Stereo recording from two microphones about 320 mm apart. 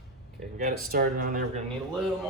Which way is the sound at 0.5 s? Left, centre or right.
Right.